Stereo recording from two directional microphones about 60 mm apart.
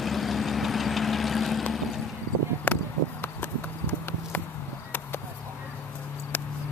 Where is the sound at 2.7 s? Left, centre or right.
Left.